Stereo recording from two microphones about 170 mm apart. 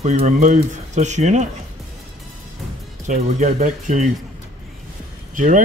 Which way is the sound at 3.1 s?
45° right (ahead or behind).